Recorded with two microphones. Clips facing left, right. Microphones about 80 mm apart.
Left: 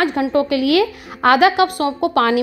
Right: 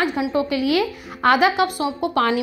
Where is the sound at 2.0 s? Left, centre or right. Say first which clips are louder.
Left 4 dB; left.